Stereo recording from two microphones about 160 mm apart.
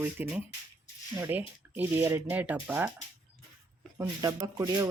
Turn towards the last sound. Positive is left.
turn(degrees=-20)  # may be behind; listen again after turning